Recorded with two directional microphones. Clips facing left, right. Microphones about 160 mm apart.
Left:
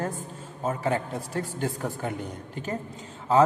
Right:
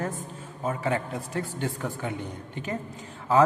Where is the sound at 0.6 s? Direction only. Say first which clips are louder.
Left 1 dB; 35° left (ahead or behind).